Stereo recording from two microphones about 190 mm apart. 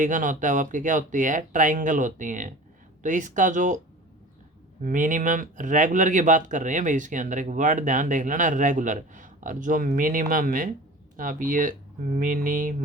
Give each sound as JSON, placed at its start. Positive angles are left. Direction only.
{"t": 0.0, "sound": "speech", "side_deg": -45}
{"t": 4.8, "sound": "speech", "side_deg": -45}